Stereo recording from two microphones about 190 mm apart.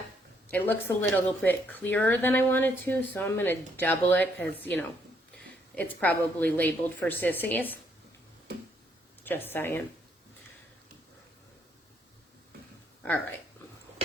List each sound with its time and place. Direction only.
0.5 s a woman's voice: 10° left (ahead or behind)
9.2 s a woman's voice: 10° left (ahead or behind)